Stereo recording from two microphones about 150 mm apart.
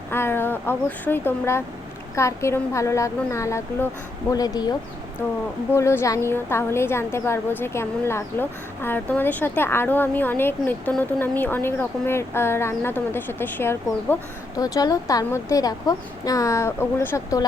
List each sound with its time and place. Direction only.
0.1 s a woman's voice: 15° left (ahead or behind)
5.7 s a woman's voice: 15° left (ahead or behind)